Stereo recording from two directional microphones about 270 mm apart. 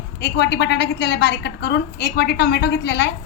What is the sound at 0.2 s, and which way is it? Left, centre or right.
A woman's voice, left.